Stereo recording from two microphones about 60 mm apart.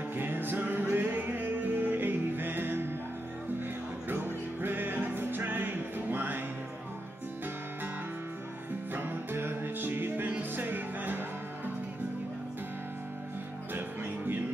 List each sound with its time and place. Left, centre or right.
0.1 s music: right
4.1 s music: right
8.9 s music: right
13.7 s music: right